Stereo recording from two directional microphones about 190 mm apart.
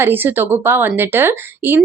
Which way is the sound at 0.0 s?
10° right (ahead or behind).